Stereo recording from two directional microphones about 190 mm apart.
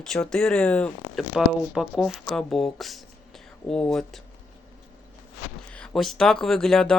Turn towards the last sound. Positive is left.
turn(degrees=5)  # may be behind; listen again after turning